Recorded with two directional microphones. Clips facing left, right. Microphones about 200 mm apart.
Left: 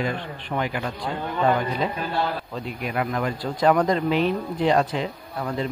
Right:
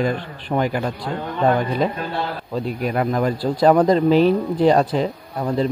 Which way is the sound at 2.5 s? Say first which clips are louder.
Right 6 dB; 40° right (ahead or behind).